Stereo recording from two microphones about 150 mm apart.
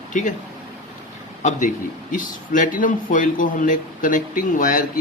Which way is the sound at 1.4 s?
55° left (ahead or behind).